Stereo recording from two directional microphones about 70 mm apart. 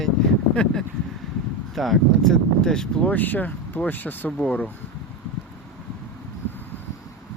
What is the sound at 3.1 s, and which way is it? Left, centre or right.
Speech, left.